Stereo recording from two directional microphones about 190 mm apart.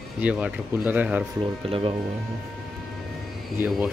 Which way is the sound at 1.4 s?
30° right (ahead or behind).